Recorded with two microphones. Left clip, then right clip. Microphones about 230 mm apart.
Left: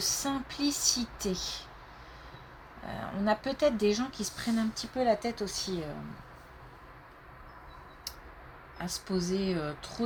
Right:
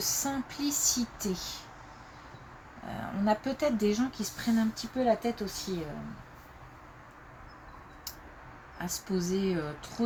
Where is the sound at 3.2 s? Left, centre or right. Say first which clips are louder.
Left 1 dB; left.